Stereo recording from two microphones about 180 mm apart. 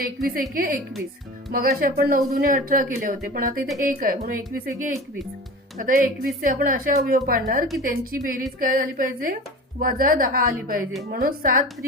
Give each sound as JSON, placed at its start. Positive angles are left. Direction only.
{"t": 0.0, "sound": "a woman's voice", "side_deg": -55}
{"t": 5.7, "sound": "a woman's voice", "side_deg": -50}